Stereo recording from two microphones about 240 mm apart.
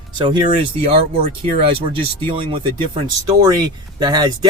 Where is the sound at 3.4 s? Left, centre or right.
Centre.